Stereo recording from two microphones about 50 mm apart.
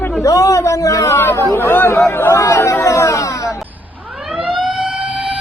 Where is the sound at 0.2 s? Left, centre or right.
Left.